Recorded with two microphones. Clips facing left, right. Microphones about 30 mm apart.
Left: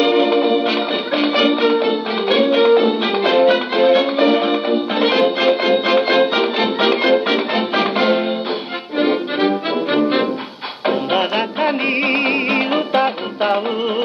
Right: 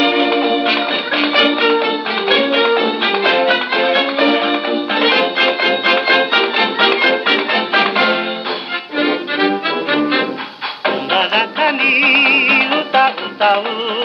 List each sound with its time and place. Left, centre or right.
0.0 s music: right
3.0 s music: right
9.8 s music: right